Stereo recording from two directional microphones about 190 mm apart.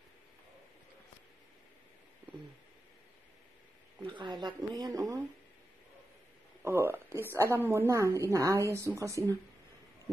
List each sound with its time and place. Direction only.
4.0 s speech: 25° right (ahead or behind)
6.6 s a sound: 15° right (ahead or behind)
7.3 s a woman's voice: 15° right (ahead or behind)